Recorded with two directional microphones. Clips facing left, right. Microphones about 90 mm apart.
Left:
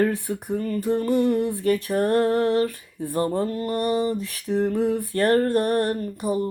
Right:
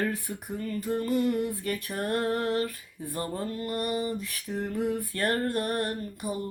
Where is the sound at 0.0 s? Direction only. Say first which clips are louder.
Left 8 dB; 40° left (ahead or behind).